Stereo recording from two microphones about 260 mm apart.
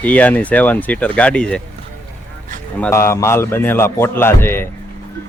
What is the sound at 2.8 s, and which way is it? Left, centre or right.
A man's voice, centre.